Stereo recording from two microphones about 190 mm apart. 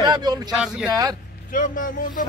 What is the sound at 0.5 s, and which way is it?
Speech, 5° right (ahead or behind).